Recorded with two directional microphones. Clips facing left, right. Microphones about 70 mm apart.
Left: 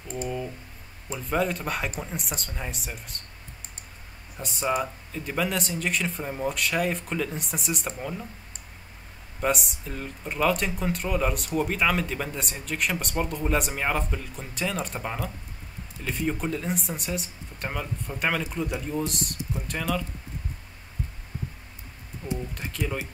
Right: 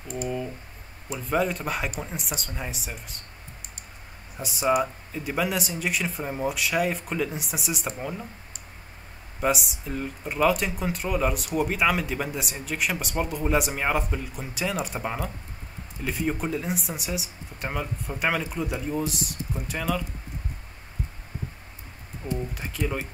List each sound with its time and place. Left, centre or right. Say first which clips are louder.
1.2 s speech: right 1 dB; centre
4.4 s speech: right 4 dB; centre
9.4 s speech: right 1 dB; centre
22.5 s speech: right 1 dB; centre